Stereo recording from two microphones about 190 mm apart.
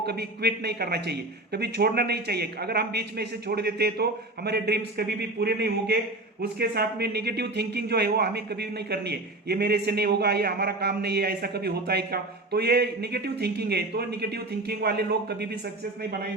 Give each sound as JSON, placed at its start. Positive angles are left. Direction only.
{"t": 0.0, "sound": "speech", "side_deg": -60}